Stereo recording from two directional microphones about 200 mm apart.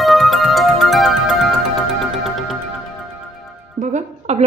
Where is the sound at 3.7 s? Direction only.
35° right (ahead or behind).